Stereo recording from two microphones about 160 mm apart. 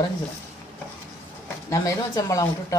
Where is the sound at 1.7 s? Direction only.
20° left (ahead or behind).